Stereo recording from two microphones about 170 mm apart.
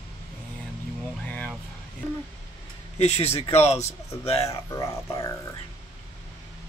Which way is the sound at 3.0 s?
40° left (ahead or behind).